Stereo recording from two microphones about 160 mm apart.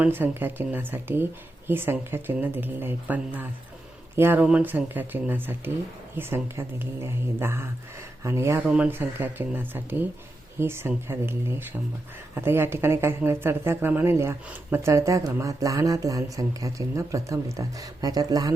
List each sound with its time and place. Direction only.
0.0 s speech: 10° right (ahead or behind)